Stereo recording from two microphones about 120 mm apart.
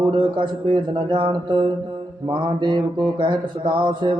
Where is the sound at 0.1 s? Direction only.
40° right (ahead or behind).